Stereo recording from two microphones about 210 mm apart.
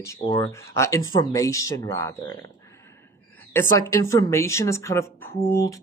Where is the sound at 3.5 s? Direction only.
15° left (ahead or behind).